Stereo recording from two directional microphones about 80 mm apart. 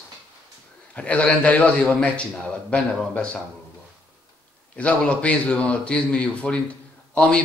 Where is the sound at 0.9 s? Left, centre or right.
Centre.